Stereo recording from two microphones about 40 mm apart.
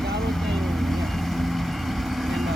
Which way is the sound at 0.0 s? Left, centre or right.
Centre.